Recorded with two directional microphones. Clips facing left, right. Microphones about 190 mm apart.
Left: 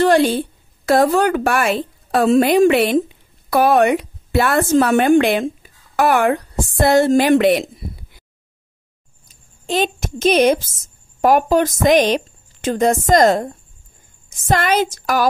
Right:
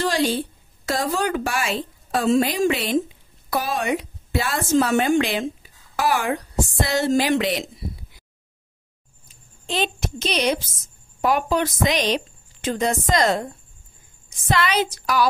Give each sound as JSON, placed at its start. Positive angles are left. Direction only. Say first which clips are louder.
{"t": 0.0, "sound": "a woman's voice", "louder": "left 8 dB", "side_deg": 55}
{"t": 9.3, "sound": "a woman's voice", "louder": "left 7 dB", "side_deg": 45}